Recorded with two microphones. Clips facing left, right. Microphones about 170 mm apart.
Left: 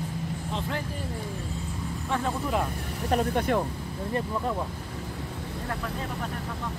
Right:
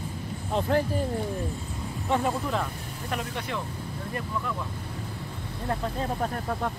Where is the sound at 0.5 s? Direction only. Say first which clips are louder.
Right 10 dB; 45° right (ahead or behind).